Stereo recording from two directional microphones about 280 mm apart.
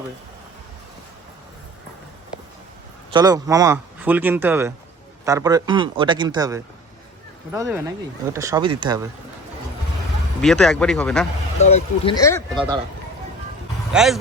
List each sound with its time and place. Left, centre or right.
3.1 s speech: centre
10.4 s speech: centre
11.6 s speech: left
13.9 s speech: centre